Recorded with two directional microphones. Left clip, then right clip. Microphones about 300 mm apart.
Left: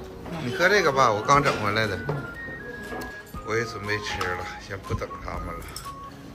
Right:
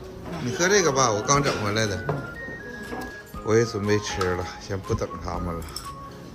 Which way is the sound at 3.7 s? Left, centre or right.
Centre.